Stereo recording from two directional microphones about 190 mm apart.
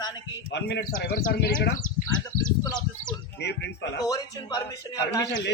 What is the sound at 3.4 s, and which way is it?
Speech, 65° left (ahead or behind).